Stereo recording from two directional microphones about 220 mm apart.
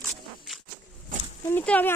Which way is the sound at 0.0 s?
Centre (ahead or behind).